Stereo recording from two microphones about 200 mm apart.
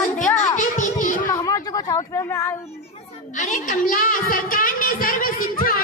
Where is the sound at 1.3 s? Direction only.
20° left (ahead or behind).